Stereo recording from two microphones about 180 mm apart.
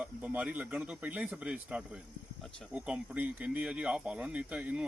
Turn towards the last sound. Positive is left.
turn(degrees=-5)  # may be behind; listen again after turning